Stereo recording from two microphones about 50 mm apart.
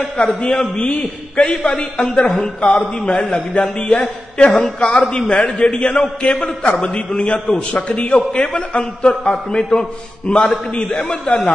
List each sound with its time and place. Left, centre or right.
0.2 s a man's voice: left